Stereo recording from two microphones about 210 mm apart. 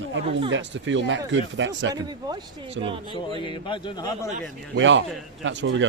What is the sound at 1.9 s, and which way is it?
Speech, 20° right (ahead or behind).